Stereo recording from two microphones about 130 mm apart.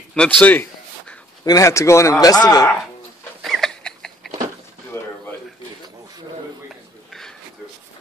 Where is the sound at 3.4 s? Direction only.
5° left (ahead or behind).